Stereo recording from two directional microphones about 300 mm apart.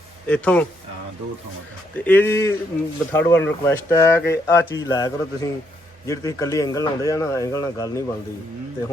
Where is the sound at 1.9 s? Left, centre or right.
Centre.